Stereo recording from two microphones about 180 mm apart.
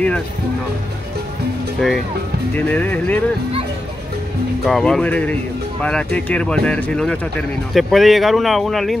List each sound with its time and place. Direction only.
1.8 s speech: centre (ahead or behind)
4.6 s speech: centre (ahead or behind)